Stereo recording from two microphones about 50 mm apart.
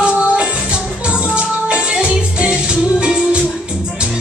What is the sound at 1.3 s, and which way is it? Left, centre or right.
Music, right.